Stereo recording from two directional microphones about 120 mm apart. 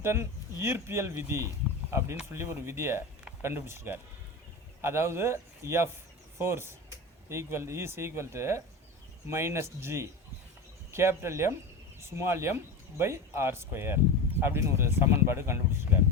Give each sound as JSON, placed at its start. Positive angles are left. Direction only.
{"t": 0.0, "sound": "speech", "side_deg": -20}